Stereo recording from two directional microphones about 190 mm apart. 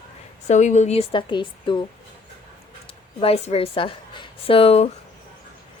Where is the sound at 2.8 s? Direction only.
30° left (ahead or behind).